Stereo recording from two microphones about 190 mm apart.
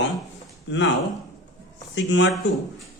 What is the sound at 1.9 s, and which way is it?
Speech, 75° left (ahead or behind).